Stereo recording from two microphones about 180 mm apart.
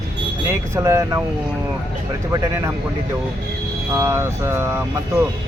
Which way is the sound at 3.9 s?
15° right (ahead or behind).